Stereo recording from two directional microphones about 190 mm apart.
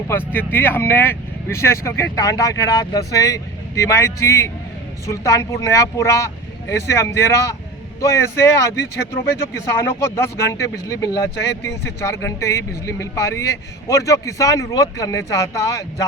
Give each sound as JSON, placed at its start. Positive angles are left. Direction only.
{"t": 0.3, "sound": "speech", "side_deg": 10}